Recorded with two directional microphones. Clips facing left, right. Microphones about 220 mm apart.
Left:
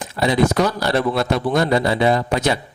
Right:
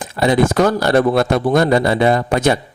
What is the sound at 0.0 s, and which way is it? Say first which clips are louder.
A man's voice: right 3 dB; 50° right (ahead or behind).